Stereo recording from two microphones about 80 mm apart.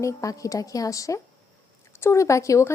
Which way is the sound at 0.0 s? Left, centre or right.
Left.